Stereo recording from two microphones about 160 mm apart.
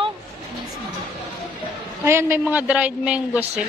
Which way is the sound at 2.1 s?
15° right (ahead or behind).